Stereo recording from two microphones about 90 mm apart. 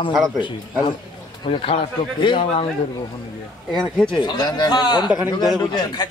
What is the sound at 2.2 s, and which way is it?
Speech, 65° left (ahead or behind).